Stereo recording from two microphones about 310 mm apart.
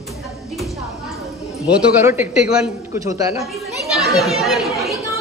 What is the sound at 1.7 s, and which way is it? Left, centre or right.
A man's voice, centre.